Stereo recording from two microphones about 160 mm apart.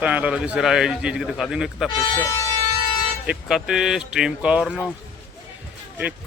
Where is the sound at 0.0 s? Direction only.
10° right (ahead or behind).